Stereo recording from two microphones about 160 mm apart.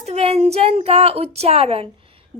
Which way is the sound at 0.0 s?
40° right (ahead or behind).